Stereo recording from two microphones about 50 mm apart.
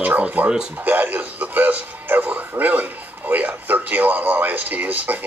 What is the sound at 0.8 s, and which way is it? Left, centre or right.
Music, right.